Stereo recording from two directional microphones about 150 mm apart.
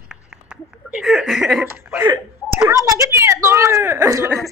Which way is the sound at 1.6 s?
15° right (ahead or behind).